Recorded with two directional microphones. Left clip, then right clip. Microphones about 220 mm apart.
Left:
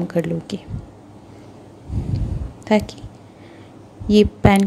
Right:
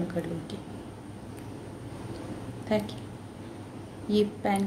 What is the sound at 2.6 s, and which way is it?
Speech, 35° left (ahead or behind).